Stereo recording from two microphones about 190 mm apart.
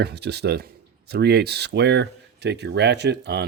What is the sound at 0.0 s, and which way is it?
Speech, 60° right (ahead or behind).